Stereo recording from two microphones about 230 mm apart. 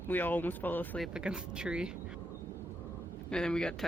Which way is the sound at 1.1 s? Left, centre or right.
Centre.